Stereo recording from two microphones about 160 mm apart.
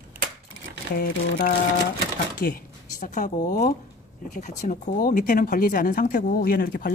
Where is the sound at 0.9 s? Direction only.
65° left (ahead or behind).